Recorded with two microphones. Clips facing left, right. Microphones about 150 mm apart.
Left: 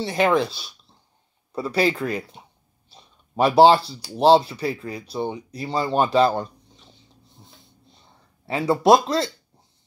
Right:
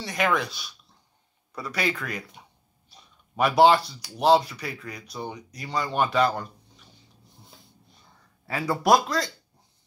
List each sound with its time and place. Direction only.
0.0 s speech: 30° left (ahead or behind)
8.5 s speech: 25° left (ahead or behind)